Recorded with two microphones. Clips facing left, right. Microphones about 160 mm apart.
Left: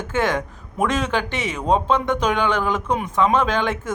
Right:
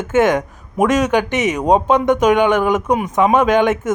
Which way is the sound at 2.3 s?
15° right (ahead or behind).